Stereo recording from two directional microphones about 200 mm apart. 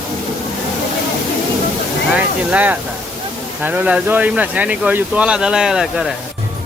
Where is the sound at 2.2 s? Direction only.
10° right (ahead or behind).